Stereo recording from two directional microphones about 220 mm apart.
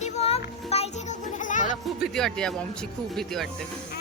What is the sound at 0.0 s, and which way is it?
Music, 30° left (ahead or behind).